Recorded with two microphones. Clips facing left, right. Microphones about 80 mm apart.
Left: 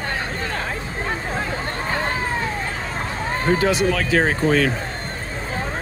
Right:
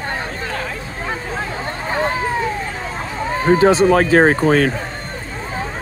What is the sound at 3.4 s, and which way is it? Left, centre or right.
Speech, right.